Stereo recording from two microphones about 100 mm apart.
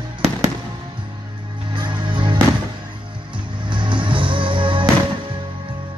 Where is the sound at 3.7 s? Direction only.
55° right (ahead or behind).